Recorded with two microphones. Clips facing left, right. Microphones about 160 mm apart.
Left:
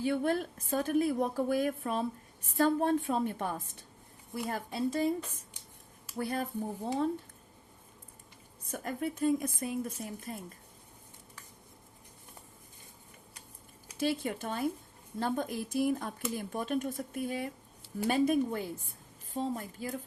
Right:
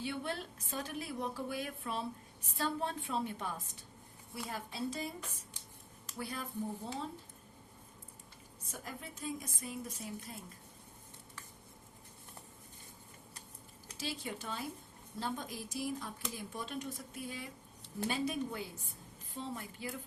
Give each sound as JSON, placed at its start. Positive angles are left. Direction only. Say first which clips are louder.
{"t": 0.0, "sound": "a woman's voice", "louder": "left 10 dB", "side_deg": 45}
{"t": 8.6, "sound": "a woman's voice", "louder": "left 12 dB", "side_deg": 55}
{"t": 14.0, "sound": "a woman's voice", "louder": "left 10 dB", "side_deg": 55}